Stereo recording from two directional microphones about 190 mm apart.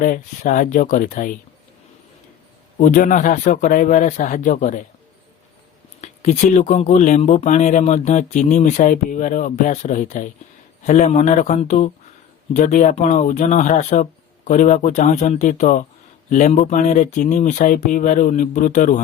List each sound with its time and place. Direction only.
0.0 s speech: 45° left (ahead or behind)
2.7 s speech: 45° left (ahead or behind)
6.0 s speech: 40° left (ahead or behind)